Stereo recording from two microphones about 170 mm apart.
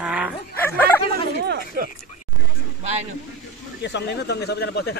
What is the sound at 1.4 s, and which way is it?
Speech, 60° right (ahead or behind).